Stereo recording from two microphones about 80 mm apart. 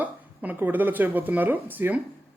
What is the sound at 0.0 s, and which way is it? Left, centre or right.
A man's voice, right.